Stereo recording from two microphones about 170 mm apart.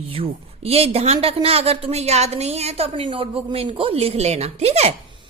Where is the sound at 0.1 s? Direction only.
35° right (ahead or behind).